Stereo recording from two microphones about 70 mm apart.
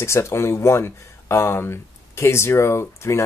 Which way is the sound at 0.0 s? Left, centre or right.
Left.